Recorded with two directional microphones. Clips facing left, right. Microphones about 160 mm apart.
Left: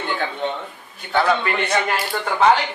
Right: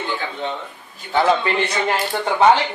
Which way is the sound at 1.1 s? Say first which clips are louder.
Right 2 dB; 20° right (ahead or behind).